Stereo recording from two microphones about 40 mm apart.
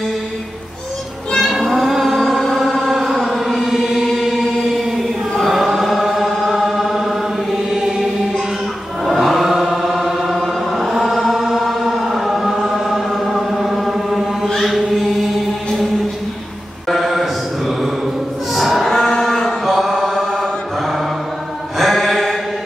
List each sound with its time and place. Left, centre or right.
1.4 s cat: centre
2.4 s chant: centre
4.9 s choir: centre
7.5 s chant: centre
10.3 s chant: centre
10.8 s chant: centre
16.9 s mantra: centre
18.5 s music: centre
18.9 s cattle: centre
19.6 s mantra: centre
19.9 s mantra: centre
21.7 s mantra: centre